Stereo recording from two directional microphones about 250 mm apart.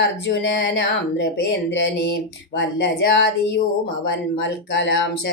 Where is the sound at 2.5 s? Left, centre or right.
Left.